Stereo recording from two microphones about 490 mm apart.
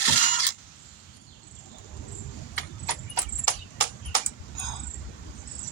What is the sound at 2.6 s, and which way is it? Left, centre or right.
Horse, left.